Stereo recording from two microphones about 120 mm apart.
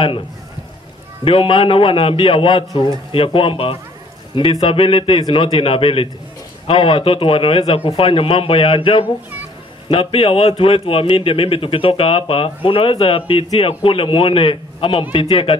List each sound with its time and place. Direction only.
1.2 s a man's voice: 45° left (ahead or behind)
2.7 s a man's voice: 35° left (ahead or behind)
3.1 s a man's voice: 50° left (ahead or behind)